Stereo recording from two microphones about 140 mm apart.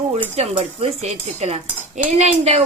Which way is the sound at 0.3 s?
50° right (ahead or behind).